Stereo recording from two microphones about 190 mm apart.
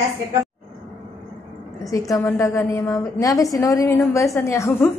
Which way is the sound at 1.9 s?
15° left (ahead or behind).